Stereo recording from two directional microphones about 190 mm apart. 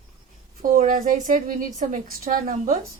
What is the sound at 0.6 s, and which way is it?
A woman's voice, 45° right (ahead or behind).